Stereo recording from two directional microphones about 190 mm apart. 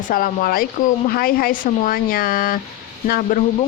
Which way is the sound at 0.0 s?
45° left (ahead or behind).